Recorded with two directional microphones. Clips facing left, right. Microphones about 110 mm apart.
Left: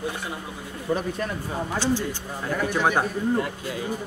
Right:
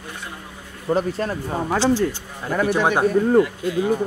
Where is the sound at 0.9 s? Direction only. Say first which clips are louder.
Right 6 dB; 30° right (ahead or behind).